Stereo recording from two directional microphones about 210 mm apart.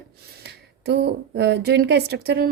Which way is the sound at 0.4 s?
50° right (ahead or behind).